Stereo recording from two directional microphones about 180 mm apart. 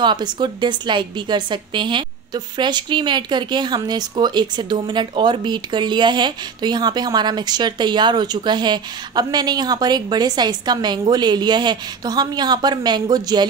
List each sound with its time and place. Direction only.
0.0 s a woman's voice: 25° right (ahead or behind)